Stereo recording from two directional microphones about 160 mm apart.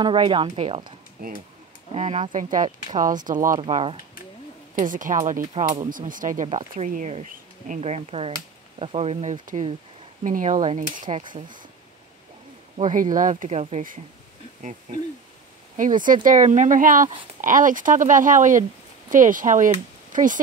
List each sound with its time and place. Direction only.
0.0 s speech: 30° right (ahead or behind)
1.2 s speech: 65° right (ahead or behind)
2.0 s speech: 45° right (ahead or behind)
3.6 s speech: 35° right (ahead or behind)
4.7 s speech: 55° right (ahead or behind)
12.7 s speech: 50° right (ahead or behind)
14.9 s speech: 50° right (ahead or behind)
20.1 s a sound: 55° right (ahead or behind)